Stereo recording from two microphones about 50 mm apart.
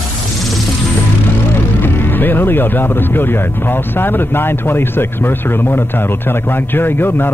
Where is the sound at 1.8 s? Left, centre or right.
Left.